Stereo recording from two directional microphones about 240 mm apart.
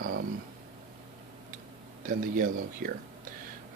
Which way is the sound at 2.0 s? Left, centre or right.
Right.